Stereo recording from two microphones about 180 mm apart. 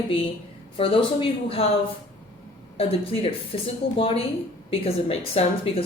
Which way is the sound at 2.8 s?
35° left (ahead or behind).